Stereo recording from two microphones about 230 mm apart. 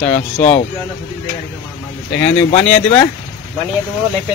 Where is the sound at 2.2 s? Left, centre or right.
Centre.